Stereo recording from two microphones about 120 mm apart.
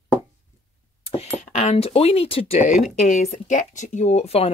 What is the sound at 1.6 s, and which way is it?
Speech, 60° left (ahead or behind).